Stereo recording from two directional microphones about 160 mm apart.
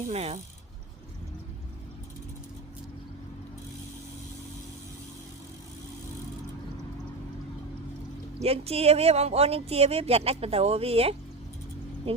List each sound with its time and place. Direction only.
0.1 s speech: 40° right (ahead or behind)
8.4 s speech: 40° right (ahead or behind)